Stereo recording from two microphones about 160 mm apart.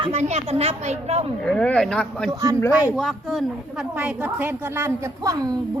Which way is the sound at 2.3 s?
20° right (ahead or behind).